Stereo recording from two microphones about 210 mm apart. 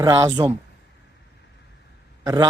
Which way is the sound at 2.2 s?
15° right (ahead or behind).